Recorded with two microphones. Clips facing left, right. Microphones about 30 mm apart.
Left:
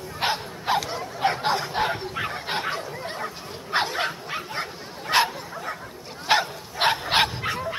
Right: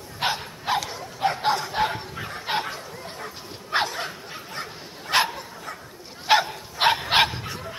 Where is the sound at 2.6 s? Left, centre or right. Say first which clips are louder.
Left 5 dB; left.